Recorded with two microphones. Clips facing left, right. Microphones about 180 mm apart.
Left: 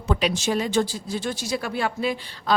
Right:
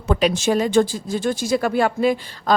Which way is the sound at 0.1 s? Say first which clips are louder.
Right 5 dB; 50° right (ahead or behind).